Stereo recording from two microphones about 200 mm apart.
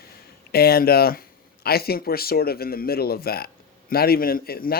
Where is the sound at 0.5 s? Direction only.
50° left (ahead or behind).